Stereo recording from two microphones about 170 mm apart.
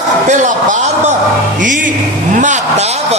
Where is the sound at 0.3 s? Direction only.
45° right (ahead or behind).